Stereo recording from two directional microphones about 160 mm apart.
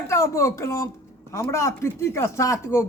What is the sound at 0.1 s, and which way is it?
Speech, 20° left (ahead or behind).